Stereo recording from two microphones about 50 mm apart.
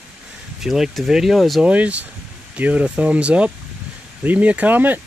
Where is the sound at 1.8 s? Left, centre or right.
Right.